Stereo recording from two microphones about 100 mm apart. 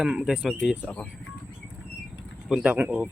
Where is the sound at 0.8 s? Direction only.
15° left (ahead or behind).